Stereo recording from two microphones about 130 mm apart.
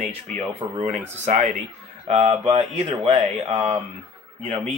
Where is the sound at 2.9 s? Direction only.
40° right (ahead or behind).